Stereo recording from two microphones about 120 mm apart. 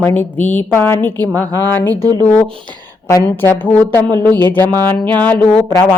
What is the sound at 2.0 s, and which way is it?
Speech, 30° right (ahead or behind).